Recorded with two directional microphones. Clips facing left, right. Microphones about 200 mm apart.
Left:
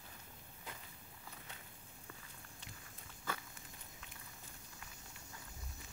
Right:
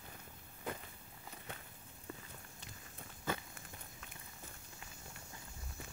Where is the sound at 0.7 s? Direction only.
55° right (ahead or behind).